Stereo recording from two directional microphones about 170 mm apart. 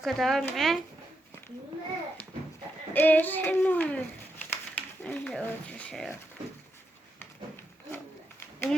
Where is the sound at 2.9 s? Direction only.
10° left (ahead or behind).